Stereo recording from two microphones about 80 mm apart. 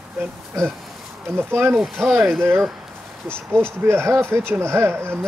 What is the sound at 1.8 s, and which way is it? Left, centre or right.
Speech, centre.